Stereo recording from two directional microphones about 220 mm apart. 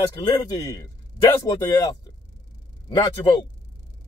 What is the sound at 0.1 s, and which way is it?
Speech, 15° left (ahead or behind).